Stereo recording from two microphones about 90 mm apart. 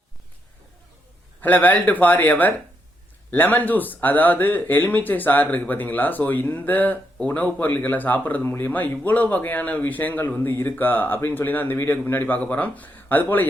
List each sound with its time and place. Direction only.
1.4 s speech: 20° left (ahead or behind)